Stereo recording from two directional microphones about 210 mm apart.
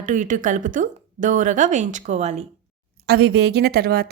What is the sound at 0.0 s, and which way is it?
A woman's voice, 35° right (ahead or behind).